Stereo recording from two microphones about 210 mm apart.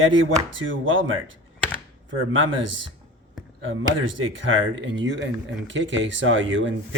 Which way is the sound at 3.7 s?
65° right (ahead or behind).